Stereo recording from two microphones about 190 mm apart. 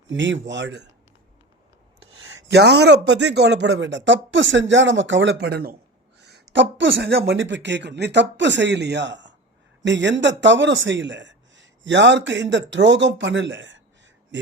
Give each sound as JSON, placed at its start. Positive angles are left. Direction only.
{"t": 0.1, "sound": "speech", "side_deg": -75}
{"t": 2.5, "sound": "speech", "side_deg": -60}